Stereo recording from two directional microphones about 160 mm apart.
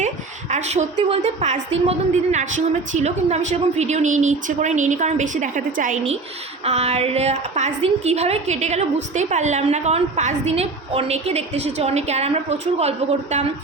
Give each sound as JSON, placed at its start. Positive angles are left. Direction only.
{"t": 0.5, "sound": "a woman's voice", "side_deg": -45}
{"t": 6.7, "sound": "a woman's voice", "side_deg": -45}